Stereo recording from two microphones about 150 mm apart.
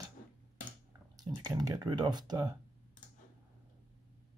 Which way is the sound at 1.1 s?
25° right (ahead or behind).